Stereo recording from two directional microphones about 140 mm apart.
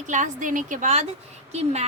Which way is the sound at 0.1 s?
65° right (ahead or behind).